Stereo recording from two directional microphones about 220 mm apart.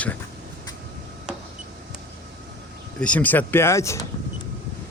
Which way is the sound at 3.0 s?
5° left (ahead or behind).